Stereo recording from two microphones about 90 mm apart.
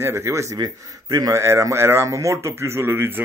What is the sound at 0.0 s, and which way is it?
Speech, 30° right (ahead or behind).